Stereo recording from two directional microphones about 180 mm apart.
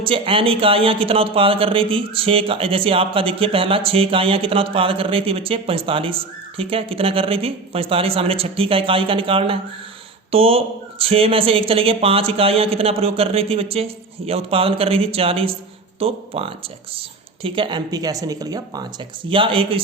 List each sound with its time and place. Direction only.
0.0 s speech: 30° right (ahead or behind)